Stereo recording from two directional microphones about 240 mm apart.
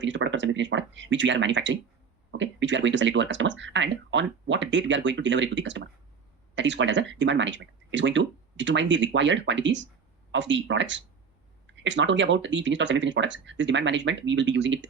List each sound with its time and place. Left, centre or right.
0.0 s speech: right